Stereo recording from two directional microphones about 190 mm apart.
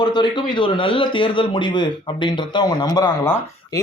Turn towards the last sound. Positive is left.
turn(degrees=15)  # may be behind; listen again after turning